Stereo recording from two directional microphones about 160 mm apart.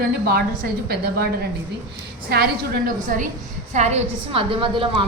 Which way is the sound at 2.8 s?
60° right (ahead or behind).